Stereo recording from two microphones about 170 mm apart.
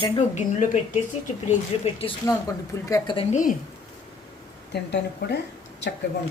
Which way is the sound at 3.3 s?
50° left (ahead or behind).